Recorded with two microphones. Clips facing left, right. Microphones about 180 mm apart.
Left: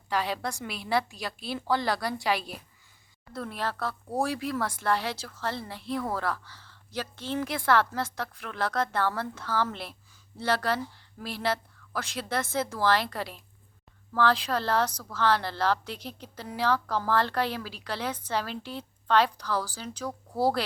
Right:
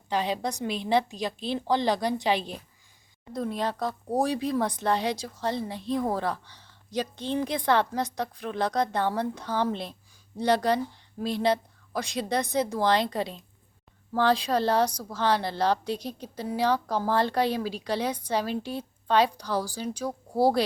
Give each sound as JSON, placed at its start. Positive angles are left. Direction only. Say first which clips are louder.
{"t": 0.1, "sound": "a woman's voice", "louder": "right 2 dB", "side_deg": -20}